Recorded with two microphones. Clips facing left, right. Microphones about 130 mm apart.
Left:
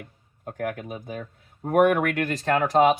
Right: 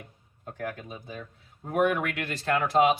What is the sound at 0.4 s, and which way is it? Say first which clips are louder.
Speech: left 5 dB; 50° left (ahead or behind).